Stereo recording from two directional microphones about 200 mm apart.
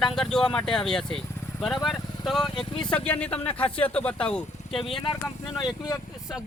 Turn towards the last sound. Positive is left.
turn(degrees=20)  # may be behind; listen again after turning